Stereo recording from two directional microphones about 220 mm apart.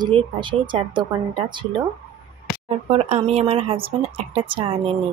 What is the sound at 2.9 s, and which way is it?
Speech, 25° right (ahead or behind).